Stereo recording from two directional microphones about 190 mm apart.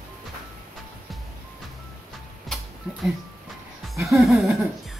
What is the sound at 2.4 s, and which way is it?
Music, centre (ahead or behind).